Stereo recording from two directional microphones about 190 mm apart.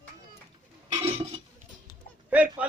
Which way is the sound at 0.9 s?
25° right (ahead or behind).